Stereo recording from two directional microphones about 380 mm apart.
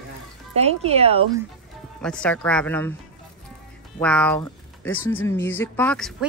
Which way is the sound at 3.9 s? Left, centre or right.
Centre.